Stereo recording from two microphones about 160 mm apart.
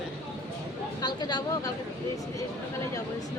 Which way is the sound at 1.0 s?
25° left (ahead or behind).